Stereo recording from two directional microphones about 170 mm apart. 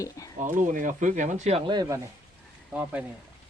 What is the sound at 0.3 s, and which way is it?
Speech, 50° right (ahead or behind).